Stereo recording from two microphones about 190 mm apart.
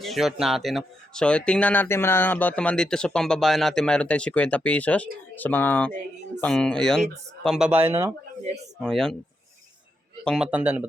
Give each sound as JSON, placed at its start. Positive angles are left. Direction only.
{"t": 0.0, "sound": "speech", "side_deg": 0}
{"t": 8.8, "sound": "speech", "side_deg": 0}
{"t": 10.2, "sound": "speech", "side_deg": -5}